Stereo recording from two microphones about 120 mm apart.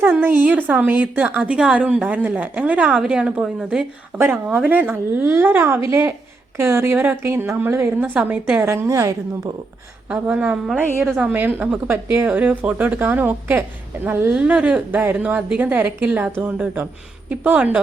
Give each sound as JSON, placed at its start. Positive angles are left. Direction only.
{"t": 0.2, "sound": "a woman's voice", "side_deg": -15}
{"t": 4.2, "sound": "a woman's voice", "side_deg": -15}
{"t": 8.6, "sound": "a woman's voice", "side_deg": -20}
{"t": 10.1, "sound": "a woman's voice", "side_deg": -10}